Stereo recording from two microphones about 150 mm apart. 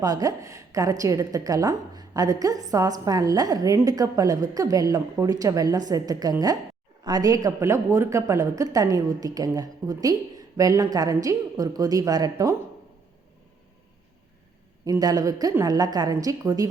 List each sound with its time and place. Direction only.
0.0 s a woman's voice: 25° right (ahead or behind)
14.8 s a woman's voice: 25° right (ahead or behind)